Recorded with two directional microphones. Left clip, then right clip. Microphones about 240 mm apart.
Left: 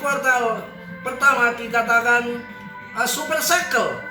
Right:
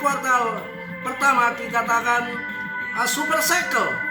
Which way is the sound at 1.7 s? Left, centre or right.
Centre.